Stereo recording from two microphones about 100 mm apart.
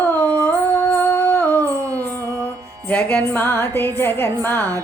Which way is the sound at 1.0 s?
25° left (ahead or behind).